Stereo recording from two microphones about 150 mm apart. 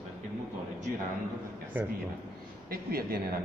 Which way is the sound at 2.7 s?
90° right.